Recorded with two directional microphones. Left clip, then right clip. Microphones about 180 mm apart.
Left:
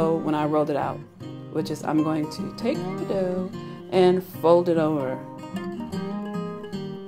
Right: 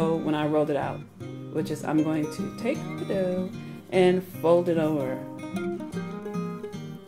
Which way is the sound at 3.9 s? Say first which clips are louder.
Left 2 dB; 15° left (ahead or behind).